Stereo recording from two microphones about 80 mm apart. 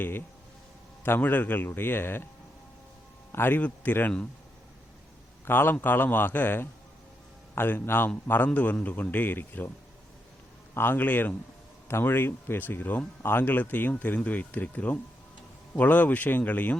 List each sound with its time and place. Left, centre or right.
1.0 s speech: left
3.3 s speech: left
5.5 s speech: left
10.8 s speech: left